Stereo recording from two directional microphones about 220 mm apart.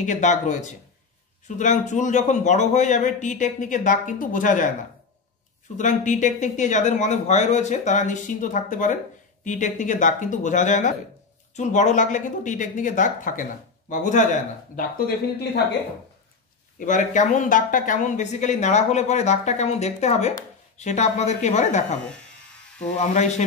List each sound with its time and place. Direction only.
0.0 s a woman's voice: 35° left (ahead or behind)
5.8 s a woman's voice: 35° left (ahead or behind)
16.7 s a woman's voice: 35° left (ahead or behind)
22.9 s a woman's voice: 30° left (ahead or behind)